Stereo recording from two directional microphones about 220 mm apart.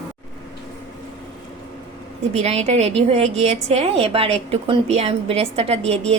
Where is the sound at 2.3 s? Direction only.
30° right (ahead or behind).